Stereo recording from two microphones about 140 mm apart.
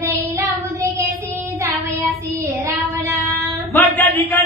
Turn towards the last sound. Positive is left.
turn(degrees=10)  # may be behind; listen again after turning